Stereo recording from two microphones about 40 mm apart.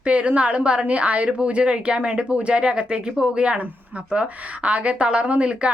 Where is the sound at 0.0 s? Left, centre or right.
Right.